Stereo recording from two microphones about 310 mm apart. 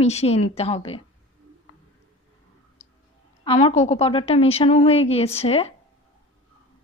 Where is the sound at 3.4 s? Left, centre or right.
Centre.